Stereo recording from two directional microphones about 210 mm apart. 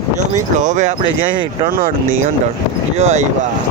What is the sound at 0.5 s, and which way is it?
Speech, 35° right (ahead or behind).